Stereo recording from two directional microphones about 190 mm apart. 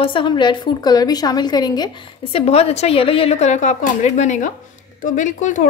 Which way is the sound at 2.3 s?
30° left (ahead or behind).